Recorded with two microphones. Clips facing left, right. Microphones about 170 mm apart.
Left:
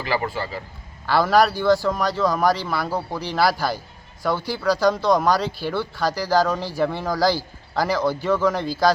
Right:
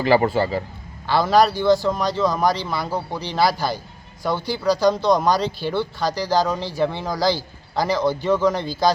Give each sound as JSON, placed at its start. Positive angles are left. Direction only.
{"t": 0.0, "sound": "a man's voice", "side_deg": -25}
{"t": 1.0, "sound": "a man's voice", "side_deg": 5}
{"t": 1.7, "sound": "a man's voice", "side_deg": -20}
{"t": 2.2, "sound": "a man's voice", "side_deg": 5}